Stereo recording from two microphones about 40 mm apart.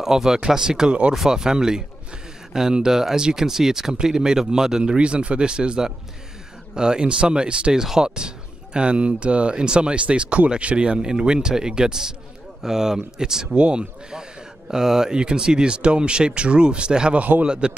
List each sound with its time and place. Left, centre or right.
0.0 s speech: centre
4.9 s speech: right
7.8 s speech: centre
13.6 s speech: right
17.2 s speech: right
17.5 s speech: right